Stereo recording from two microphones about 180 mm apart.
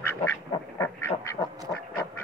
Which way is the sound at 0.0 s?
10° left (ahead or behind).